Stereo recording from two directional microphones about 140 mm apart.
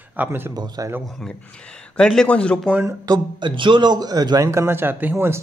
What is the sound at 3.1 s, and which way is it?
Speech, 35° right (ahead or behind).